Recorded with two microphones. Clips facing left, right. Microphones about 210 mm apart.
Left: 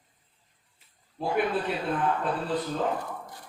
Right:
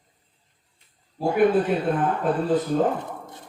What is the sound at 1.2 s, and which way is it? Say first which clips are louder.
A man's voice: right 8 dB; 45° right (ahead or behind).